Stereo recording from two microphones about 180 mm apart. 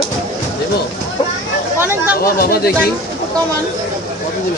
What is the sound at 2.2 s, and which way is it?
Speech, 55° left (ahead or behind).